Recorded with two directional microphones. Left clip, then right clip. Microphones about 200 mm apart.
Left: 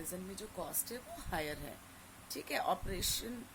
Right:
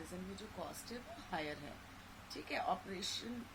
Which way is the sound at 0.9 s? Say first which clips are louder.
Left 3 dB; 65° left (ahead or behind).